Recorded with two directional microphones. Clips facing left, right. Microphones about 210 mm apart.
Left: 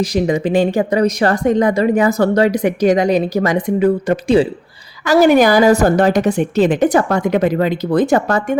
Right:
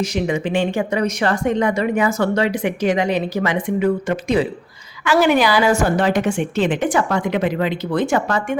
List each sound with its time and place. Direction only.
0.0 s speech: 35° left (ahead or behind)